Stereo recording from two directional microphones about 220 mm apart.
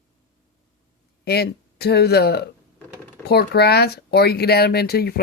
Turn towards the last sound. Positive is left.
turn(degrees=45)  # may be behind; listen again after turning